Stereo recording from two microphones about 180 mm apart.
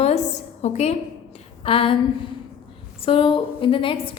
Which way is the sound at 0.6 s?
40° left (ahead or behind).